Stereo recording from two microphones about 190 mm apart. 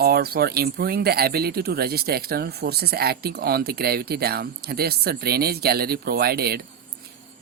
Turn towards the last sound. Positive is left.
turn(degrees=-55)  # may be behind; listen again after turning